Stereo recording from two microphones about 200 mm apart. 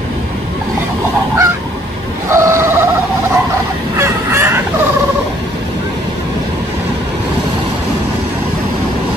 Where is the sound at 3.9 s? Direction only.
15° right (ahead or behind).